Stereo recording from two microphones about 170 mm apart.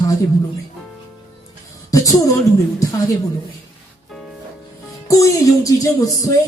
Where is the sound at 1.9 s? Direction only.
20° left (ahead or behind).